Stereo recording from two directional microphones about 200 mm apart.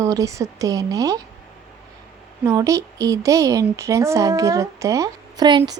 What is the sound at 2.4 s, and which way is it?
Speech, 15° right (ahead or behind).